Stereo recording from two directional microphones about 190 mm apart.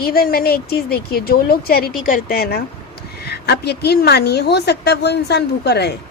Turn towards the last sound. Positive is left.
turn(degrees=60)  # may be behind; listen again after turning